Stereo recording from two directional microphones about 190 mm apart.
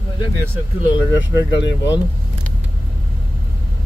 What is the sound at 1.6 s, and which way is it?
Speech, 70° left (ahead or behind).